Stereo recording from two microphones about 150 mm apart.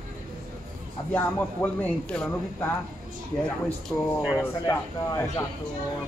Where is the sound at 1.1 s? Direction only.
10° left (ahead or behind).